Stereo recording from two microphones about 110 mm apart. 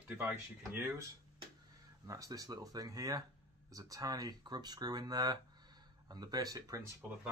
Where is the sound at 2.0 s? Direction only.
30° right (ahead or behind).